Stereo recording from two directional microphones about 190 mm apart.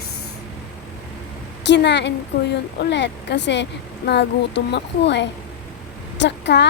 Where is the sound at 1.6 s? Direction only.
65° left (ahead or behind).